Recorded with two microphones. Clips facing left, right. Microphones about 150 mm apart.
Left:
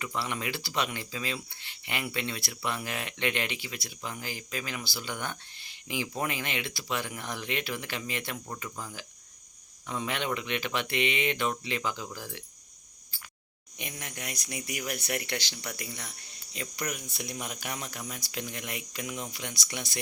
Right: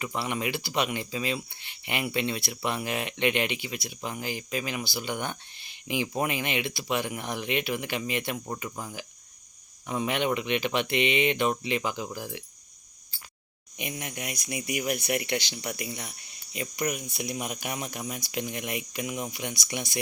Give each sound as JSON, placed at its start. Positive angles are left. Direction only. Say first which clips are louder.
{"t": 0.0, "sound": "speech", "louder": "right 3 dB", "side_deg": -15}
{"t": 13.7, "sound": "speech", "louder": "right 5 dB", "side_deg": -15}